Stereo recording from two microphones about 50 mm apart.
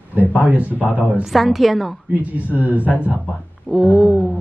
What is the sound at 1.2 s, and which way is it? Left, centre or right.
Speech, centre.